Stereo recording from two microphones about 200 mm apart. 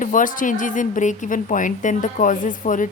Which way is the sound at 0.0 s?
40° left (ahead or behind).